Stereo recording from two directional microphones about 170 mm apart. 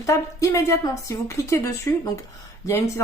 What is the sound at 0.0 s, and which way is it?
A woman's voice, 20° left (ahead or behind).